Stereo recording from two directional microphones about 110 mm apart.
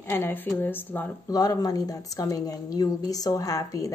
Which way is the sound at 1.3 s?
35° left (ahead or behind).